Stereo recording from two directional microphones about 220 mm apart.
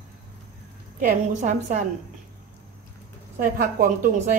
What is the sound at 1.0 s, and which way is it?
Speech, 35° right (ahead or behind).